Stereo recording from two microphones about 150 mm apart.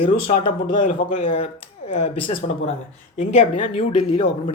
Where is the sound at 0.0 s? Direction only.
35° left (ahead or behind).